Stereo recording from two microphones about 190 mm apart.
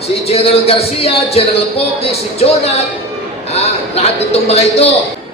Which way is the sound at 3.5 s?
35° left (ahead or behind).